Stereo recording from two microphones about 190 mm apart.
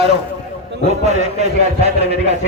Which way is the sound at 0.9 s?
35° right (ahead or behind).